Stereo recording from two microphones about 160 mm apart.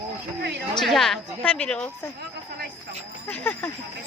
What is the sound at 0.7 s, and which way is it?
A woman's voice, centre (ahead or behind).